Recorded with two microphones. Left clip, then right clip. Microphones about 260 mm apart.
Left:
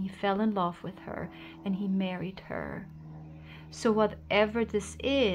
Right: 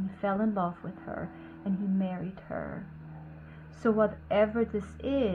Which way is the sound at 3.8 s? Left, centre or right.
Left.